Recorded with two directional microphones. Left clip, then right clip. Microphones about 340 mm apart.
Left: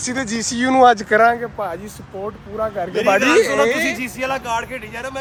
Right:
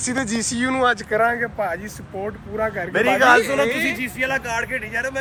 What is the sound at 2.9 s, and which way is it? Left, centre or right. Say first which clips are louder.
Speech: left 2 dB; centre.